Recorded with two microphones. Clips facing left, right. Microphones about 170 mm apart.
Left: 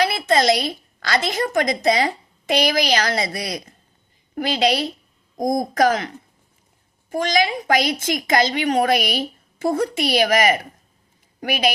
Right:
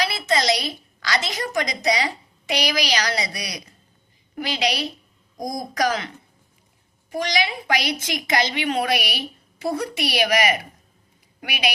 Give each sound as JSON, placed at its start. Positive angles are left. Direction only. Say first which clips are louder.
{"t": 0.0, "sound": "a woman's voice", "louder": "left 5 dB", "side_deg": 55}
{"t": 7.1, "sound": "a woman's voice", "louder": "left 4 dB", "side_deg": 45}